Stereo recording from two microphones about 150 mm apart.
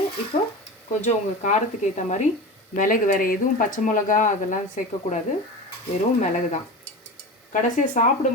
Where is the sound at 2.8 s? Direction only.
60° left (ahead or behind).